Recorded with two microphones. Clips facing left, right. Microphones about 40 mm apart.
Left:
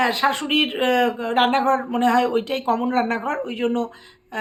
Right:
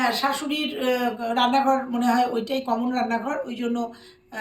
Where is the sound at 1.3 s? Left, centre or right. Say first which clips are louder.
Even; left.